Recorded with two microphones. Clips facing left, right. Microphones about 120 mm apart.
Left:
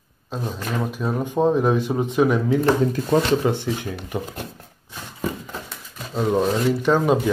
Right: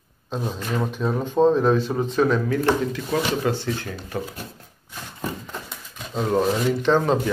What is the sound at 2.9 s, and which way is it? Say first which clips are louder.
Speech: left 5 dB; 35° left (ahead or behind).